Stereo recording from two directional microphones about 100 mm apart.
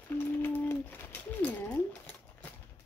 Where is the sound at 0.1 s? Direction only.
20° left (ahead or behind).